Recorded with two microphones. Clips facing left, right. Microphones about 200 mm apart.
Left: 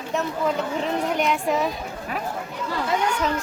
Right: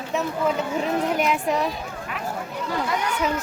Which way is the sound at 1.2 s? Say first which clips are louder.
Even; centre (ahead or behind).